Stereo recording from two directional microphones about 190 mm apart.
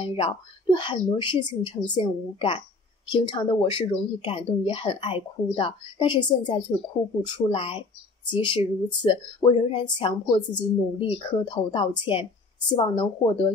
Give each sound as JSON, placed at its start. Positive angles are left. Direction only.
{"t": 0.0, "sound": "speech", "side_deg": 25}